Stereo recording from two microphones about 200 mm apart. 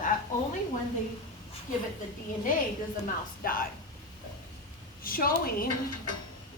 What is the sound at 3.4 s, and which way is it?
Speech, 45° left (ahead or behind).